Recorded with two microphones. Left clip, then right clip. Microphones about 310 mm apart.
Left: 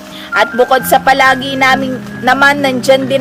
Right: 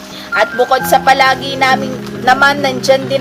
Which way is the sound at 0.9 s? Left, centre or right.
Left.